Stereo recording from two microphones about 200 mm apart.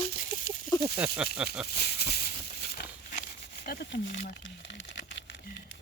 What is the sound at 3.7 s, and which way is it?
Speech, 55° left (ahead or behind).